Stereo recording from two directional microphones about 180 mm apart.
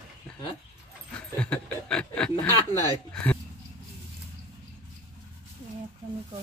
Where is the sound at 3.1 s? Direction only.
5° left (ahead or behind).